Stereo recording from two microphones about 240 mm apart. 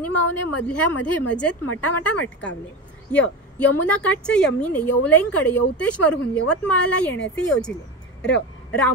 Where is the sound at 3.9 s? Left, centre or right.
Centre.